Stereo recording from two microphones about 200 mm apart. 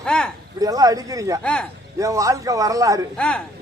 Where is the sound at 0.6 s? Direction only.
20° right (ahead or behind).